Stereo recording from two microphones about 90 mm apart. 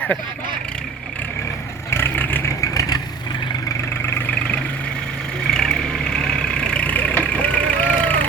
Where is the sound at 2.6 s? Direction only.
40° left (ahead or behind).